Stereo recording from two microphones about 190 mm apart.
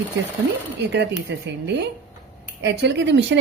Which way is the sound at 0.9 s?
65° right (ahead or behind).